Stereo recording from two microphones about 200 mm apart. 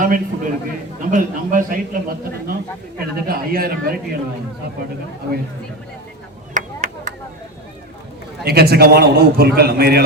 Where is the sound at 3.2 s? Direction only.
50° right (ahead or behind).